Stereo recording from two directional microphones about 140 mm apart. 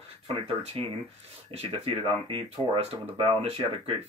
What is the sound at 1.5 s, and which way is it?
Speech, 40° right (ahead or behind).